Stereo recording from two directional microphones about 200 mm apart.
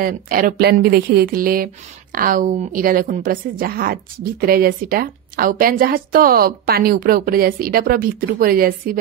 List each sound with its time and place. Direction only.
0.0 s a woman's voice: 45° right (ahead or behind)